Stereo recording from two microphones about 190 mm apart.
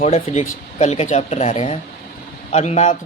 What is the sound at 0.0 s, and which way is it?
Speech, 35° left (ahead or behind).